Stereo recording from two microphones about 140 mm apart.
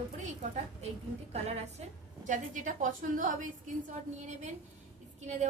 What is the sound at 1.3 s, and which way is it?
Speech, 50° right (ahead or behind).